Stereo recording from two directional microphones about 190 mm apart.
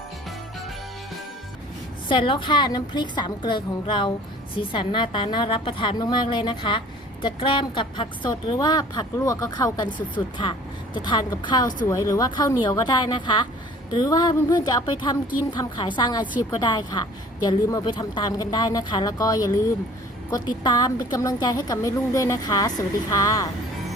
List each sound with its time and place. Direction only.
2.0 s a woman's voice: 25° left (ahead or behind)